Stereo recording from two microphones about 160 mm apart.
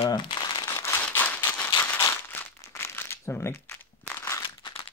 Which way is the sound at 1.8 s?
15° left (ahead or behind).